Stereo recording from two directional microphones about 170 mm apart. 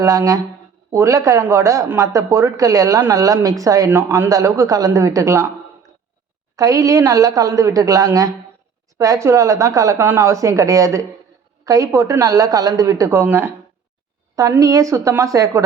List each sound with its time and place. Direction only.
0.0 s speech: 20° right (ahead or behind)
6.6 s speech: 20° right (ahead or behind)